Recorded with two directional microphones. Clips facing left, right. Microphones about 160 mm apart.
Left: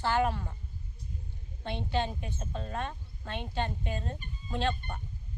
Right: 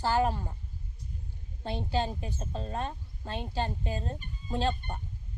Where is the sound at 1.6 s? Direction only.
35° right (ahead or behind).